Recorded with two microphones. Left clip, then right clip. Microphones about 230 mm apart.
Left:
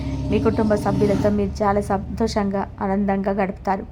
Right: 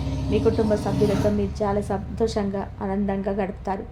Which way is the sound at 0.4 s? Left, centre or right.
Centre.